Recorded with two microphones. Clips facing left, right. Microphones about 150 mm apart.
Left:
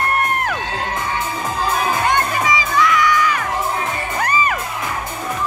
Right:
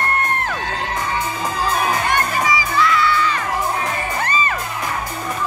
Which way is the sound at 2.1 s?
20° left (ahead or behind).